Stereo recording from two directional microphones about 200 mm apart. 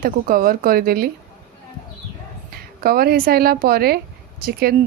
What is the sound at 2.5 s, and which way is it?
Speech, 50° right (ahead or behind).